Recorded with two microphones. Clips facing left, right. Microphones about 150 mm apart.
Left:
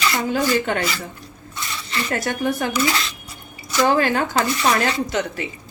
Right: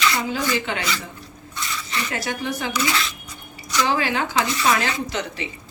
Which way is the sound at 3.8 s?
50° left (ahead or behind).